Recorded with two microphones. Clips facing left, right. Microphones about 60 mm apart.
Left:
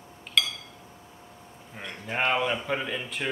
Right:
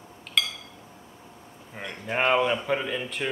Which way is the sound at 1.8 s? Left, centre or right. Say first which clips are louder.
Right 2 dB; centre.